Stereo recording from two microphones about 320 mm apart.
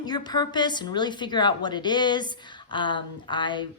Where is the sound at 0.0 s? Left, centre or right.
Centre.